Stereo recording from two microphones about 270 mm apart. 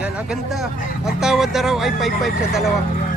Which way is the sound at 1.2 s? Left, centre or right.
Centre.